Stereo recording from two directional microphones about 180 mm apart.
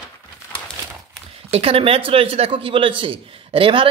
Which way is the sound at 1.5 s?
30° right (ahead or behind).